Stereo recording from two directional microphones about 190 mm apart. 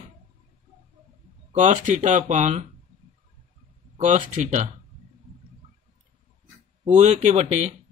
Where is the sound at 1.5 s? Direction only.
40° right (ahead or behind).